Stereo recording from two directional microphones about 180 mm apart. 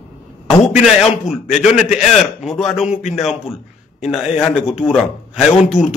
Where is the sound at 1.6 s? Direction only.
5° right (ahead or behind).